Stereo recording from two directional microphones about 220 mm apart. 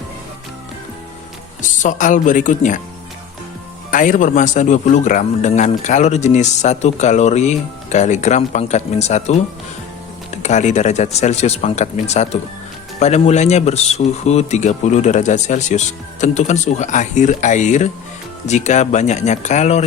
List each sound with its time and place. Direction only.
1.8 s a man's voice: 35° left (ahead or behind)
3.9 s a man's voice: 35° left (ahead or behind)